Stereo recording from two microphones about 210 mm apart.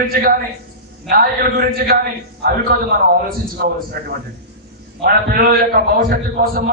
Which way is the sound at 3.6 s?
45° right (ahead or behind).